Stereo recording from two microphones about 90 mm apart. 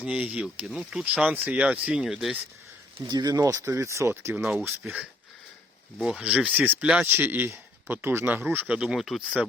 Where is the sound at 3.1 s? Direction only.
45° right (ahead or behind); by 4.4 s 30° right (ahead or behind).